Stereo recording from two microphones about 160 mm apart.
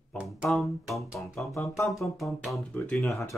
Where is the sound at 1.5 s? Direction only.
20° left (ahead or behind).